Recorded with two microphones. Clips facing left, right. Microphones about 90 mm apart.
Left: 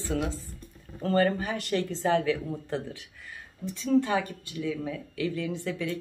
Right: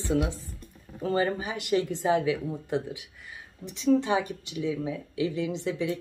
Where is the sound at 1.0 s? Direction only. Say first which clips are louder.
Left 2 dB; 10° right (ahead or behind).